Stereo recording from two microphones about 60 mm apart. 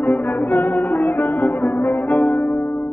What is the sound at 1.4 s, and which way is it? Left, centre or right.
Brass instrument, left.